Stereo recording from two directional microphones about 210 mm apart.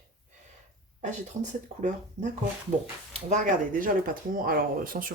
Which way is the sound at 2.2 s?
35° right (ahead or behind).